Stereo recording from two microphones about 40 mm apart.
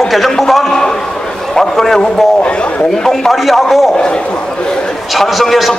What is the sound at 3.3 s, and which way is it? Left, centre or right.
Speech, centre.